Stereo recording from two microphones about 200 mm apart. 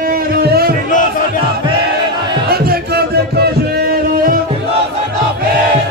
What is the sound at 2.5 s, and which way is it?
Music, 50° right (ahead or behind).